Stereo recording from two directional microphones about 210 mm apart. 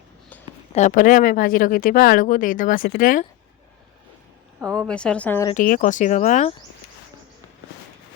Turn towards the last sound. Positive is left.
turn(degrees=35)  # may be behind; listen again after turning